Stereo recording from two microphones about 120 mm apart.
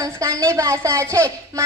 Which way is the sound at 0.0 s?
30° right (ahead or behind).